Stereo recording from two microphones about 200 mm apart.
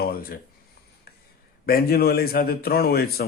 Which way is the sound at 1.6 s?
50° left (ahead or behind).